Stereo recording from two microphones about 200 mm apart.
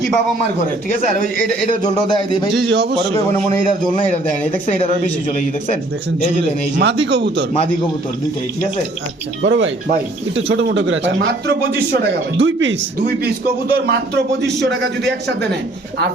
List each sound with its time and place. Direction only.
1.1 s a man's voice: 45° right (ahead or behind)
1.8 s a man's voice: 20° left (ahead or behind)
2.6 s speech: 55° right (ahead or behind)
6.8 s speech: 60° right (ahead or behind)
9.4 s a man's voice: 70° right (ahead or behind)